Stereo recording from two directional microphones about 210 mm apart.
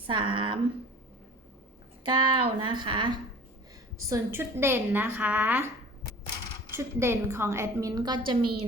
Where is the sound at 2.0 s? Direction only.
20° right (ahead or behind).